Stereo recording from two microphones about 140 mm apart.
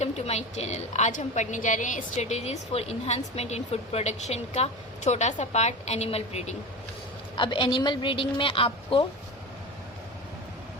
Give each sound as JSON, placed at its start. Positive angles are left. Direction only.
{"t": 0.0, "sound": "a woman's voice", "side_deg": 50}
{"t": 7.3, "sound": "a woman's voice", "side_deg": 35}